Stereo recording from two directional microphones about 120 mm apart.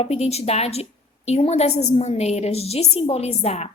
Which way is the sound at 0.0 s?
60° left (ahead or behind).